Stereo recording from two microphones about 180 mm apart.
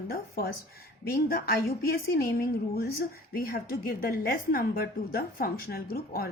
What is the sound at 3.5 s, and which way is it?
A woman's voice, 55° left (ahead or behind).